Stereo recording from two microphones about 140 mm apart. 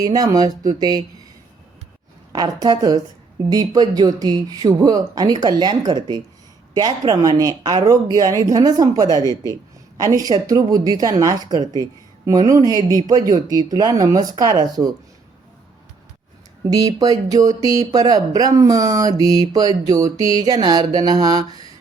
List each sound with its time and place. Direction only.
0.0 s speech: 25° right (ahead or behind)
2.3 s speech: 25° right (ahead or behind)
9.2 s speech: 25° left (ahead or behind)
10.0 s speech: 25° right (ahead or behind)
16.6 s speech: 25° right (ahead or behind)